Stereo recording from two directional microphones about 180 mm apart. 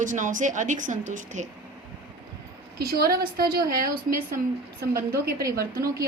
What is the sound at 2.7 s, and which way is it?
A woman's voice, 60° right (ahead or behind).